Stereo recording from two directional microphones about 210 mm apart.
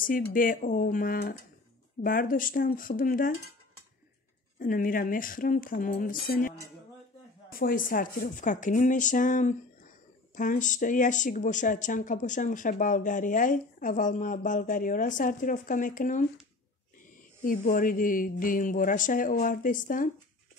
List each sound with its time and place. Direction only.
0.0 s speech: 40° left (ahead or behind)
4.6 s speech: 40° left (ahead or behind)
7.5 s speech: 40° left (ahead or behind)
17.4 s speech: 40° left (ahead or behind)